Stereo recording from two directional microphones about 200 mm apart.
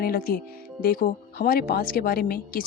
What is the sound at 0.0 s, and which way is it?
Speech, 45° left (ahead or behind).